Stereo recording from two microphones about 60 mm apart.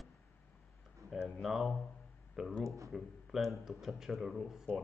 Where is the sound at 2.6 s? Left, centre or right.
Right.